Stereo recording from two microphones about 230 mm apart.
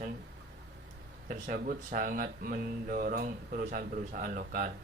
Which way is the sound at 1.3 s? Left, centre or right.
Right.